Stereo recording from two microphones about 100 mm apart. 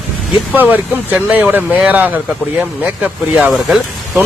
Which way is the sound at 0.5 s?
15° right (ahead or behind).